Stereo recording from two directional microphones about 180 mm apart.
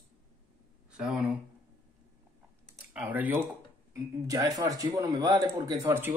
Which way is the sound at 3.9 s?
20° right (ahead or behind).